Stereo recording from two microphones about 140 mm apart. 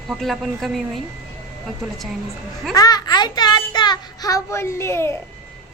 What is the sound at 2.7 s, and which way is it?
A child's voice, 25° left (ahead or behind).